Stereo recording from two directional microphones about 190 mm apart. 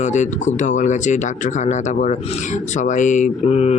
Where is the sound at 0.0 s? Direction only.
40° left (ahead or behind).